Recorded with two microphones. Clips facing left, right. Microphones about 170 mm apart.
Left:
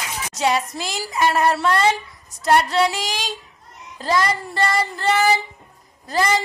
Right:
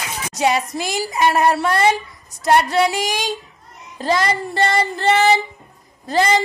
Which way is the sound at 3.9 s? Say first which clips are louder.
Right 2 dB; 25° right (ahead or behind).